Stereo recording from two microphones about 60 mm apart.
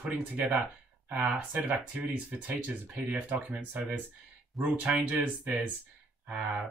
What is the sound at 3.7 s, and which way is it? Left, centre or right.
Speech, right.